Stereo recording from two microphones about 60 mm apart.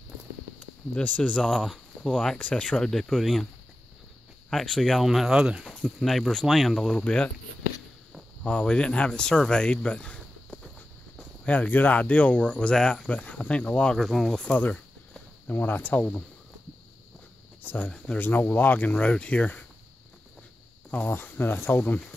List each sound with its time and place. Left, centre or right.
0.9 s speech: left
1.4 s speech: centre
4.5 s speech: centre
5.0 s speech: centre
5.9 s speech: centre
6.9 s speech: centre
8.5 s speech: centre
11.4 s speech: left
13.1 s speech: left
13.9 s speech: centre
15.4 s speech: left
17.6 s a sound: left
18.1 s speech: left
21.1 s speech: left